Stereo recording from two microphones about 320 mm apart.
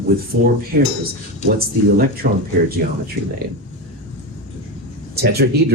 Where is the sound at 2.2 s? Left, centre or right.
Right.